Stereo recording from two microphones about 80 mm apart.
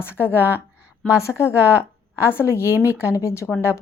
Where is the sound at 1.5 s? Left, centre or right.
Centre.